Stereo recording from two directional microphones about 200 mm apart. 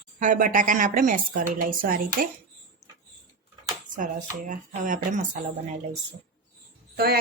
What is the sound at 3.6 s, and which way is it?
Speech, 40° right (ahead or behind).